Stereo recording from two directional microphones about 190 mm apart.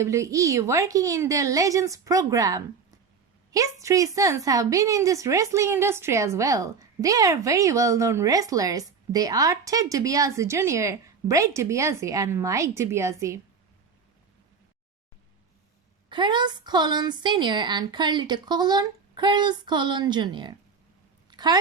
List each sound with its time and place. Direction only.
0.0 s a woman's voice: 15° right (ahead or behind)
16.0 s a woman's voice: 25° right (ahead or behind)
21.2 s a sound: 20° right (ahead or behind)